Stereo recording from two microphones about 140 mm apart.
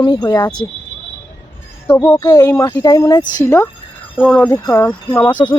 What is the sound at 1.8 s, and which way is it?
Speech, 10° left (ahead or behind).